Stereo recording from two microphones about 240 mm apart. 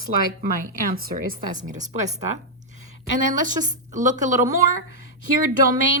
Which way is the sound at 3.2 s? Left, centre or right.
Right.